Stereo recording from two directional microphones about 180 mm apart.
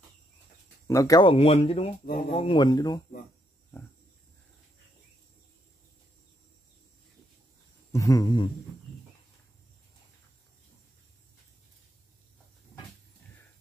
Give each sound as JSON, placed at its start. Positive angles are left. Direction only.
{"t": 0.8, "sound": "speech", "side_deg": 15}
{"t": 2.0, "sound": "speech", "side_deg": 60}
{"t": 2.3, "sound": "speech", "side_deg": 30}
{"t": 7.9, "sound": "speech", "side_deg": 20}